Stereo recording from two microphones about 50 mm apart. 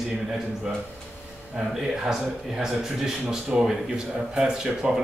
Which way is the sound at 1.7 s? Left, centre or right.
Centre.